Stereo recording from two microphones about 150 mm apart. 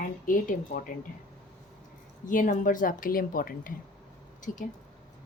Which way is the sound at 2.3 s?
60° left (ahead or behind).